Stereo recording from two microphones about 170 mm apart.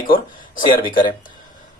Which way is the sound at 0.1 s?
55° left (ahead or behind).